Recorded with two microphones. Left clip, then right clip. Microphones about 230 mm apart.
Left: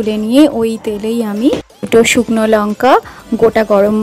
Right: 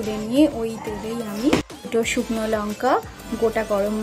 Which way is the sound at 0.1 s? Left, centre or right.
Left.